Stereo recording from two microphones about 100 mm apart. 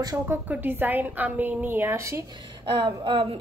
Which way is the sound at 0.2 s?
20° right (ahead or behind).